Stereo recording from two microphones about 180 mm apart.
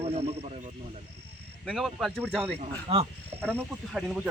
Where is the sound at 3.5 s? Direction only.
Centre (ahead or behind).